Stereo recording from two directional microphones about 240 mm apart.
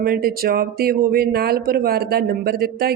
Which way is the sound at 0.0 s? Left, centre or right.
Right.